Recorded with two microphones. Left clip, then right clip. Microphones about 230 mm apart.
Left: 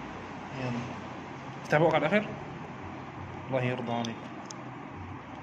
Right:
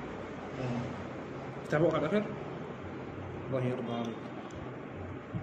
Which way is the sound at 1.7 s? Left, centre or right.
Left.